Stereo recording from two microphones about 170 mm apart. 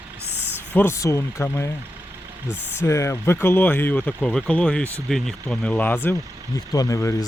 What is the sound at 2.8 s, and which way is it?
Speech, 15° left (ahead or behind).